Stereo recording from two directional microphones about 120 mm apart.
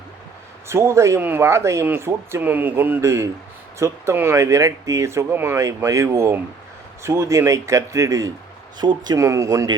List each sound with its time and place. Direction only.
0.7 s speech: 20° right (ahead or behind)